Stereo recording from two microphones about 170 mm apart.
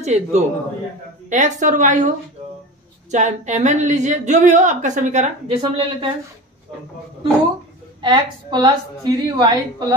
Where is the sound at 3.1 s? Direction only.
45° right (ahead or behind).